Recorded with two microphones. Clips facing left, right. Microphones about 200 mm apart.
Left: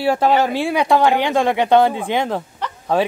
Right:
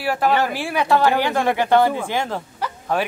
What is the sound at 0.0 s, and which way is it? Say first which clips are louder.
Speech: left 4 dB; 25° left (ahead or behind).